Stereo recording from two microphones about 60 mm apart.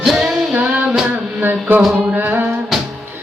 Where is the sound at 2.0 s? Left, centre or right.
Right.